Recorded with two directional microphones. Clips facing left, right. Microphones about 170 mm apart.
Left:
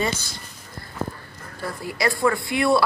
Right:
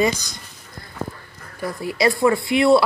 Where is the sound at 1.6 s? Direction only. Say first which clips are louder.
Right 5 dB; 20° right (ahead or behind).